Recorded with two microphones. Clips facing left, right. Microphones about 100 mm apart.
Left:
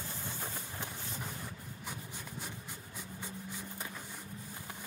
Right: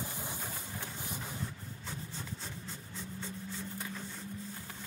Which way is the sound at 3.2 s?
15° left (ahead or behind).